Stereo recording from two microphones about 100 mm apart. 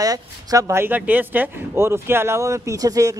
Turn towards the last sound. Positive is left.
turn(degrees=-35)  # may be behind; listen again after turning